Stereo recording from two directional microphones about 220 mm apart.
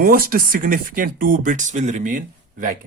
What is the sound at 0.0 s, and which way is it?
Speech, 40° right (ahead or behind).